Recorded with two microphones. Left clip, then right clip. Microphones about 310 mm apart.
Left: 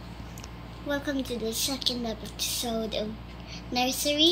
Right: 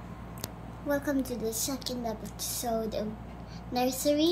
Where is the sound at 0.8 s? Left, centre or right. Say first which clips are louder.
Even; centre.